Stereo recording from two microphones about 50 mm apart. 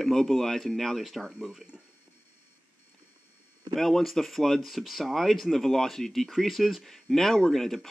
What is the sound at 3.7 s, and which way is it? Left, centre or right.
Speech, centre.